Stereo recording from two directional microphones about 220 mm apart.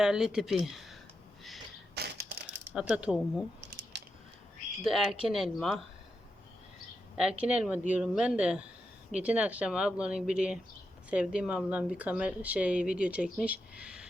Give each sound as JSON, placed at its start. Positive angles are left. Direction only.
{"t": 0.0, "sound": "speech", "side_deg": -5}
{"t": 2.0, "sound": "crushing", "side_deg": -45}
{"t": 2.7, "sound": "speech", "side_deg": -5}
{"t": 3.9, "sound": "a sound", "side_deg": -50}
{"t": 4.9, "sound": "speech", "side_deg": 0}
{"t": 7.4, "sound": "speech", "side_deg": -5}